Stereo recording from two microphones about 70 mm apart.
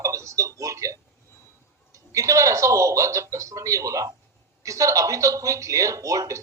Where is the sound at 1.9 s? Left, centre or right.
Right.